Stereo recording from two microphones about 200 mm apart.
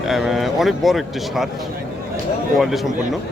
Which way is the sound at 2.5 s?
Centre (ahead or behind).